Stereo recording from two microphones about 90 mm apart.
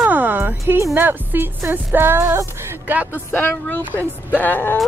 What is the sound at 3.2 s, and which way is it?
Speech, 25° left (ahead or behind).